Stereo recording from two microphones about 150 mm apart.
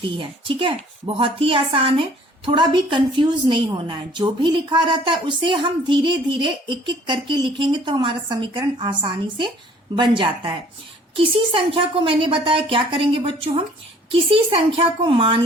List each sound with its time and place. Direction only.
0.0 s a woman's voice: 35° right (ahead or behind)